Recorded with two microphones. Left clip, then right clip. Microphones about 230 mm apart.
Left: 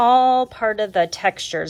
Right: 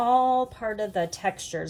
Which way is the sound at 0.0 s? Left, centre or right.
Left.